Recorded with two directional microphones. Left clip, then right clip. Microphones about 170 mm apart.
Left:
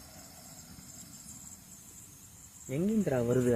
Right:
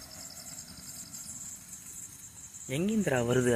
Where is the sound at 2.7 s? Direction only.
5° left (ahead or behind).